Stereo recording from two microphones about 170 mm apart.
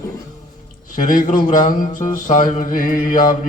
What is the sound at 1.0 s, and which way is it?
Music, 50° left (ahead or behind).